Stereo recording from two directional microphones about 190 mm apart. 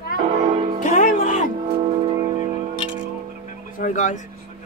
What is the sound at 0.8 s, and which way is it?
Music, 40° left (ahead or behind).